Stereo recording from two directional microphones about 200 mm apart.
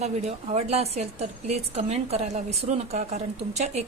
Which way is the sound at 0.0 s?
30° right (ahead or behind).